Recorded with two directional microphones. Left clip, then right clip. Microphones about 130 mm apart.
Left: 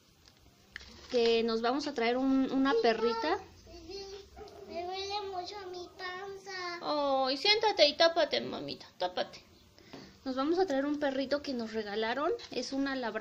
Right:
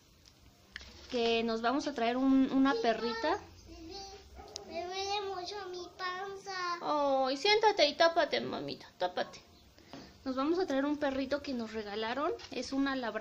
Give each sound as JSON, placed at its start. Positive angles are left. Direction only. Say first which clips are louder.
{"t": 1.1, "sound": "a woman's voice", "louder": "left 3 dB", "side_deg": 5}
{"t": 2.2, "sound": "speech", "louder": "right 1 dB", "side_deg": -10}
{"t": 2.6, "sound": "speech", "louder": "left 3 dB", "side_deg": 10}
{"t": 4.6, "sound": "child singing", "louder": "right 1 dB", "side_deg": -20}
{"t": 6.8, "sound": "a woman's voice", "louder": "left 1 dB", "side_deg": 5}